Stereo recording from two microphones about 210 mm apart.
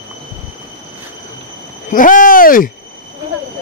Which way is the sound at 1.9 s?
40° left (ahead or behind).